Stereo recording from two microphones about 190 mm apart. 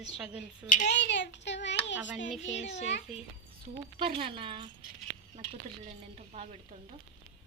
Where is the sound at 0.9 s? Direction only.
65° left (ahead or behind).